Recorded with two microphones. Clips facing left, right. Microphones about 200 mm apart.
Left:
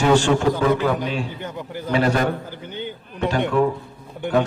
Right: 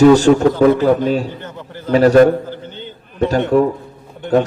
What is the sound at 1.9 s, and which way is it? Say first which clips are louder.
Speech: right 11 dB; 40° right (ahead or behind).